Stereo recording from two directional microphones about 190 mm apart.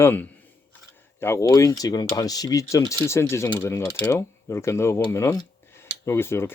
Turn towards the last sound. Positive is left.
turn(degrees=15)  # may be behind; listen again after turning